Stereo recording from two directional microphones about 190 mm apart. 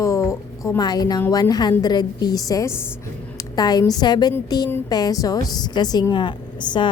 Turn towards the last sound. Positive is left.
turn(degrees=25)  # may be behind; listen again after turning